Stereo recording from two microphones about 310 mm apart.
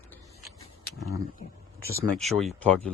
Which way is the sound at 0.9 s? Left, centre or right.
Centre.